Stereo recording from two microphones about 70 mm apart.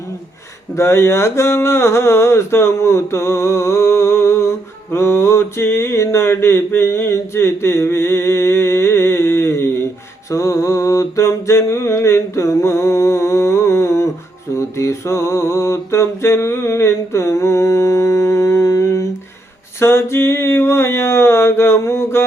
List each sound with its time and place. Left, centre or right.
0.8 s speech: left
10.2 s a sound: left
19.8 s speech: left